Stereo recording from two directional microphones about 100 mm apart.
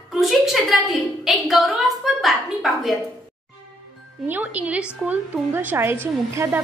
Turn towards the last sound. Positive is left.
turn(degrees=-25)  # may be behind; listen again after turning